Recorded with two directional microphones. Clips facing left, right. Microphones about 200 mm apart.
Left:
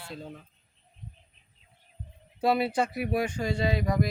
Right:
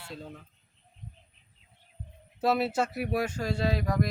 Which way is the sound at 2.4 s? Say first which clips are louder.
Left 1 dB; centre (ahead or behind).